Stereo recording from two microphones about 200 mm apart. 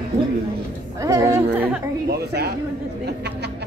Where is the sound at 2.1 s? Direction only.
55° right (ahead or behind).